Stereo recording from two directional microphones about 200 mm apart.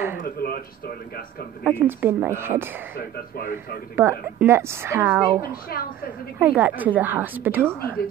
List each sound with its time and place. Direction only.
0.2 s speech: 50° left (ahead or behind)
1.7 s a woman's voice: 10° right (ahead or behind)
3.0 s speech: 45° left (ahead or behind)
3.9 s a woman's voice: 10° right (ahead or behind)
5.7 s speech: 50° left (ahead or behind)
6.4 s a woman's voice: 10° right (ahead or behind)